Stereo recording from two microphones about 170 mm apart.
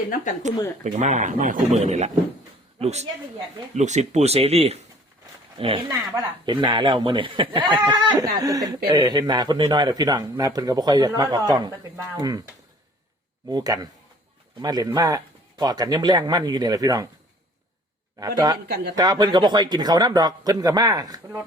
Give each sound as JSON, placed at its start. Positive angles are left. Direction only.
{"t": 0.9, "sound": "a woman's voice", "side_deg": -45}
{"t": 13.5, "sound": "speech", "side_deg": -25}
{"t": 18.2, "sound": "speech", "side_deg": -20}